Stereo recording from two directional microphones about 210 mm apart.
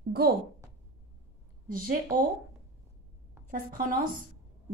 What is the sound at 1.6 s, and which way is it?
Speech, 40° right (ahead or behind).